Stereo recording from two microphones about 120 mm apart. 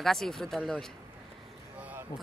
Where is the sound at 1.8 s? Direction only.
15° right (ahead or behind).